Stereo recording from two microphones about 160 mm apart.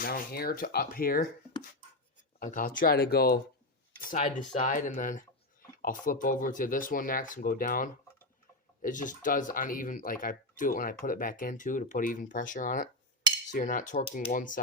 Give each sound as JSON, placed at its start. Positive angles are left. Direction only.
{"t": 0.0, "sound": "speech", "side_deg": 70}
{"t": 2.4, "sound": "speech", "side_deg": 60}
{"t": 4.1, "sound": "speech", "side_deg": 50}